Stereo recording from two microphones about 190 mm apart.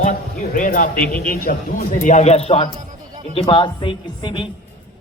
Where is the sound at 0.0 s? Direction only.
45° left (ahead or behind).